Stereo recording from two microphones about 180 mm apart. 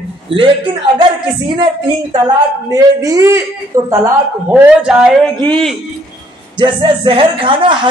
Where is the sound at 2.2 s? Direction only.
20° right (ahead or behind); by 5.8 s 5° left (ahead or behind).